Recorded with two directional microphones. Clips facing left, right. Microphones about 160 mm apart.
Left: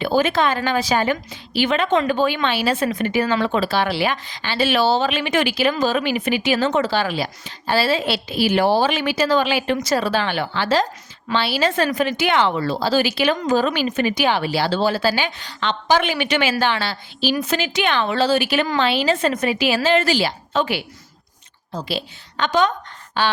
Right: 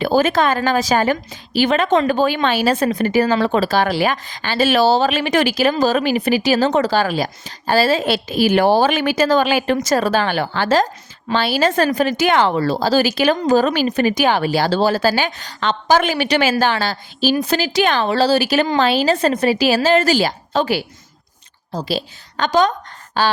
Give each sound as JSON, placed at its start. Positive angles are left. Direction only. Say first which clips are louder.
{"t": 0.0, "sound": "a woman's voice", "louder": "right 3 dB", "side_deg": -40}